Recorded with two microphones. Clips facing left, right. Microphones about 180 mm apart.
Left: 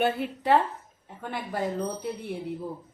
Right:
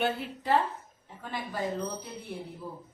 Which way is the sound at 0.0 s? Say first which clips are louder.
Left 4 dB; 60° left (ahead or behind).